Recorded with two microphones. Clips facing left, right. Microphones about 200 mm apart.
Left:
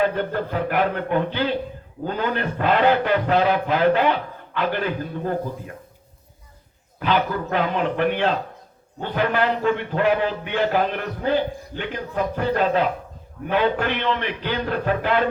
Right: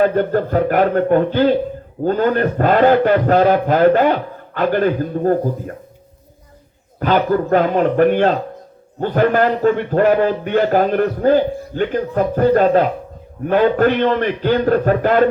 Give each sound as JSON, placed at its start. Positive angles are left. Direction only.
{"t": 0.0, "sound": "a man's voice", "side_deg": -45}
{"t": 7.0, "sound": "a man's voice", "side_deg": -45}